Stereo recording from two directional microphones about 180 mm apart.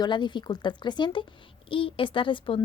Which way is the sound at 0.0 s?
25° left (ahead or behind).